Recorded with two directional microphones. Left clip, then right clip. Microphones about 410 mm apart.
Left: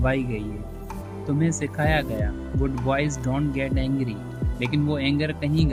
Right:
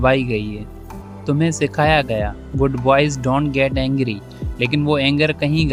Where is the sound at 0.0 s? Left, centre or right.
Centre.